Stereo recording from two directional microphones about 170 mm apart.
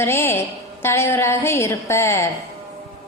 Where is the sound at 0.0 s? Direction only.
15° left (ahead or behind).